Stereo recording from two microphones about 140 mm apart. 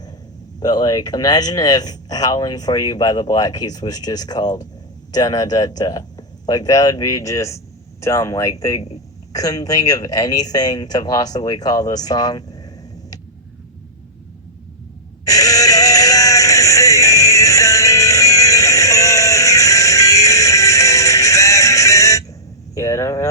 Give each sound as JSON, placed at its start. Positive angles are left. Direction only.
{"t": 0.6, "sound": "speech", "side_deg": 30}
{"t": 15.2, "sound": "synthetic singing", "side_deg": 25}
{"t": 22.7, "sound": "vehicle", "side_deg": 25}